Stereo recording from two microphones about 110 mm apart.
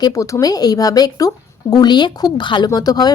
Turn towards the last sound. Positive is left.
turn(degrees=35)  # may be behind; listen again after turning